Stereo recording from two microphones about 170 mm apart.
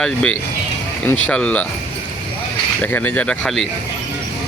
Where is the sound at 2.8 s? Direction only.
10° left (ahead or behind).